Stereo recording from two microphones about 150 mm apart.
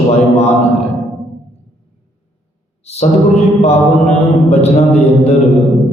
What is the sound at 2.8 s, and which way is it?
Mantra, 45° left (ahead or behind).